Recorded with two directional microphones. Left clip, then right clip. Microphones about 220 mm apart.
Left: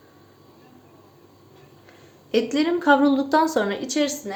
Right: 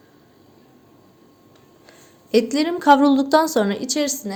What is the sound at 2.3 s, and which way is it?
A woman's voice, 45° right (ahead or behind).